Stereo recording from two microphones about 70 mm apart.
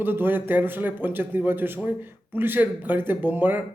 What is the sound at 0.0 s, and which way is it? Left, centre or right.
Speech, right.